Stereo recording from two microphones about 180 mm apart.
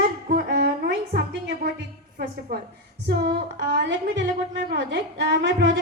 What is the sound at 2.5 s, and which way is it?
Speech, 65° right (ahead or behind).